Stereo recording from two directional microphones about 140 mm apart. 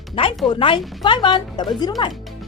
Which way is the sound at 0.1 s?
40° left (ahead or behind).